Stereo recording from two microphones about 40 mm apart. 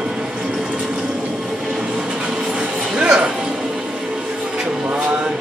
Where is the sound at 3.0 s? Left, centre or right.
Right.